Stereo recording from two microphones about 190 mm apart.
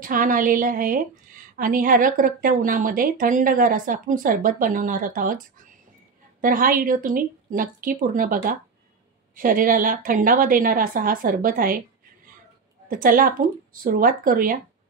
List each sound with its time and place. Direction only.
0.0 s a woman's voice: 45° right (ahead or behind)
6.4 s a woman's voice: 45° right (ahead or behind)
12.8 s a woman's voice: 45° right (ahead or behind)